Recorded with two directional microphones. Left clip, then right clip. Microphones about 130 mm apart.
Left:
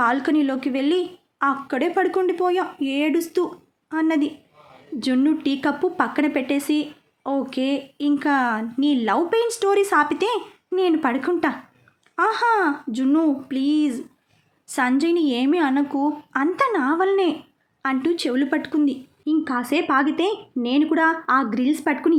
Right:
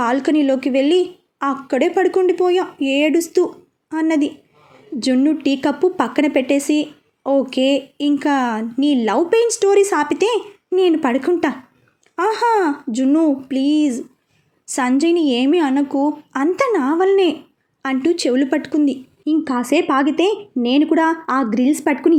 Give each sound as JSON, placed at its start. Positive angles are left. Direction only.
{"t": 0.0, "sound": "a woman's voice", "side_deg": -20}